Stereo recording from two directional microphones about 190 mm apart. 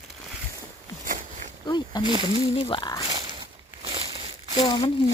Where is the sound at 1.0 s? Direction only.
40° right (ahead or behind).